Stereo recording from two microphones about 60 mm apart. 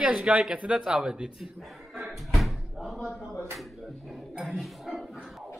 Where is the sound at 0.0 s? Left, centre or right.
Centre.